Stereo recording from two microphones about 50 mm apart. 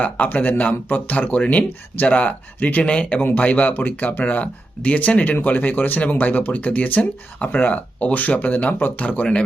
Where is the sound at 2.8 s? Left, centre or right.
Left.